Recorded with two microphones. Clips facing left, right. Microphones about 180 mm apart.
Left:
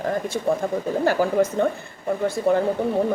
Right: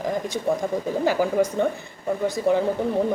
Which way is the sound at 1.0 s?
15° right (ahead or behind).